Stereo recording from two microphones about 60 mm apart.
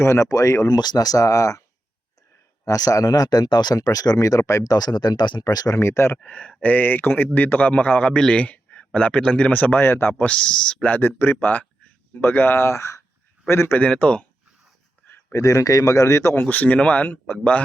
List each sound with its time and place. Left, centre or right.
0.0 s a man's voice: left
0.7 s speech: left
2.6 s speech: left
5.7 s speech: left
6.2 s a man's voice: left
10.2 s speech: centre
10.8 s speech: left
13.7 s a man's voice: centre
15.3 s a man's voice: left
16.3 s a man's voice: left